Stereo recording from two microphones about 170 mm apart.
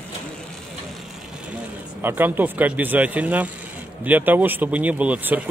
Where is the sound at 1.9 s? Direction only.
10° right (ahead or behind).